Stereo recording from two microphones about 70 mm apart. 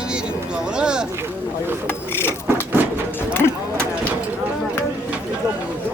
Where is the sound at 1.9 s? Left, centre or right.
Left.